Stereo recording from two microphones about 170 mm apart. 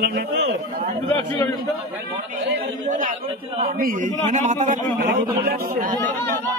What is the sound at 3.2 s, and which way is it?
Speech, 35° right (ahead or behind).